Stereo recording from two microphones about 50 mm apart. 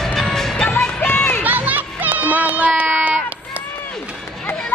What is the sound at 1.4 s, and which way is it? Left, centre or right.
Music, right.